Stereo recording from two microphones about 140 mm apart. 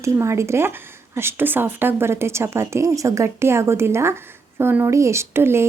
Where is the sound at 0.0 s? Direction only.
20° right (ahead or behind).